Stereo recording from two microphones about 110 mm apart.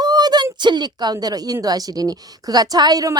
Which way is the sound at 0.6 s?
40° right (ahead or behind).